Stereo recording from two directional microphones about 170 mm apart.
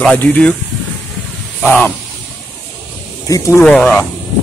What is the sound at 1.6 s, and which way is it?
Speech, 10° left (ahead or behind).